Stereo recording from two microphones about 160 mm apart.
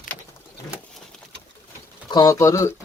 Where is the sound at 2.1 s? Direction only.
25° left (ahead or behind).